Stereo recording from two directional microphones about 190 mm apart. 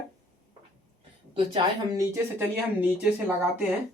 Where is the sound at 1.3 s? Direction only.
25° right (ahead or behind).